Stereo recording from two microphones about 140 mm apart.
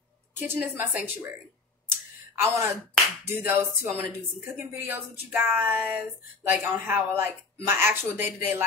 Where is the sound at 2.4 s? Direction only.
20° right (ahead or behind).